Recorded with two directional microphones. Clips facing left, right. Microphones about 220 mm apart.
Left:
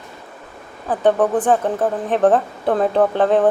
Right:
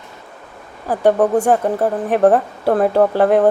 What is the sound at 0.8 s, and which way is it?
Speech, 10° right (ahead or behind).